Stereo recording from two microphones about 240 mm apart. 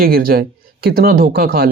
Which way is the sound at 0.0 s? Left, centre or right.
Right.